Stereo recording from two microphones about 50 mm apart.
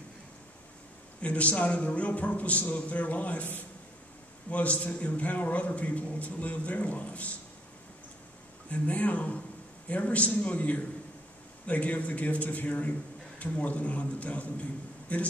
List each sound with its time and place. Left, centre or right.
1.2 s a man's voice: left
8.6 s a man's voice: left